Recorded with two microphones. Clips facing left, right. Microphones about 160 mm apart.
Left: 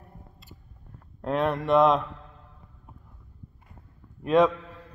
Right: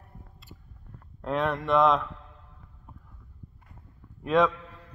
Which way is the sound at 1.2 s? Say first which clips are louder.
Left 2 dB; 5° left (ahead or behind).